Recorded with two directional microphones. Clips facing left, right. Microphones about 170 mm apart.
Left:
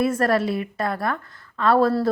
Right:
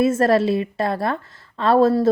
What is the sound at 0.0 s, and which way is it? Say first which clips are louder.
A woman's voice: right 4 dB; 25° right (ahead or behind).